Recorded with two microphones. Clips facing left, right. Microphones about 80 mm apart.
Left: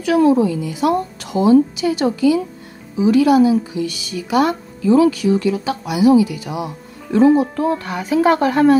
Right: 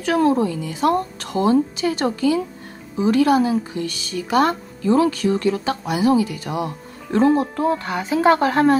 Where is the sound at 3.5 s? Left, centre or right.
Centre.